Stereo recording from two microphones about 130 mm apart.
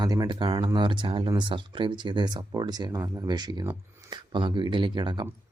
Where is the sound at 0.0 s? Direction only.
30° right (ahead or behind).